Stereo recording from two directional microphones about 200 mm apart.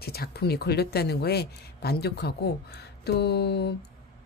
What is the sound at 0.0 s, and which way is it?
Speech, 50° left (ahead or behind).